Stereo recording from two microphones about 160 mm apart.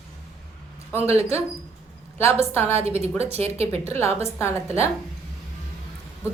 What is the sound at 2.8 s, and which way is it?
A woman's voice, 40° right (ahead or behind).